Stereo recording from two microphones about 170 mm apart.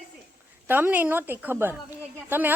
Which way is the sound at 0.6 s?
10° right (ahead or behind).